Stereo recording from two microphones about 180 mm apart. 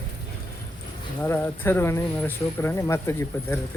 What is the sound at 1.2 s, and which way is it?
Speech, 10° left (ahead or behind).